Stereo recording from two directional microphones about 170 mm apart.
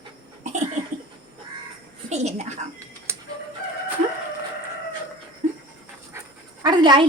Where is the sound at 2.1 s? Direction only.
40° right (ahead or behind).